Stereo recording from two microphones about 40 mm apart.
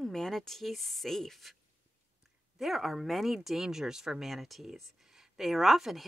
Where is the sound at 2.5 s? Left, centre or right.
Centre.